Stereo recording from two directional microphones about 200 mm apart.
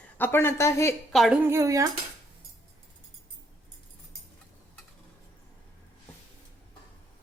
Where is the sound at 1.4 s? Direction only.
15° right (ahead or behind).